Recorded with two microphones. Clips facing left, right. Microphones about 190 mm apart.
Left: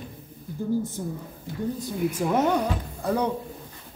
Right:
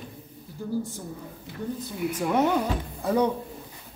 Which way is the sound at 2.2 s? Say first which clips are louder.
Even; centre (ahead or behind).